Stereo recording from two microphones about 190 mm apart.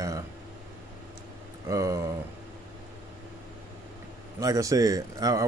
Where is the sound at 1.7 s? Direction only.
15° right (ahead or behind).